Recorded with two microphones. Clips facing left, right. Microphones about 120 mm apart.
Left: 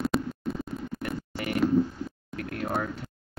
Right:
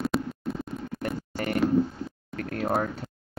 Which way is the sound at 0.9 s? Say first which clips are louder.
Right 5 dB; centre (ahead or behind).